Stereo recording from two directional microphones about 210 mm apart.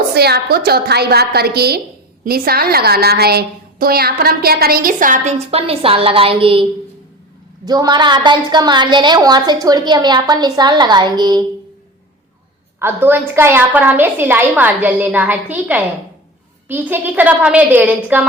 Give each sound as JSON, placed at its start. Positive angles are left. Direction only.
{"t": 0.1, "sound": "a woman's voice", "side_deg": -50}
{"t": 12.8, "sound": "a woman's voice", "side_deg": -10}